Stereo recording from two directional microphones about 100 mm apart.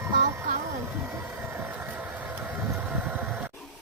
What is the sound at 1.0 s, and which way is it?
Vehicle, 20° right (ahead or behind).